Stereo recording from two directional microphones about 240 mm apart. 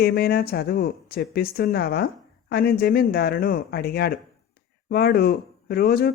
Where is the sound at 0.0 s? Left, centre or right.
Left.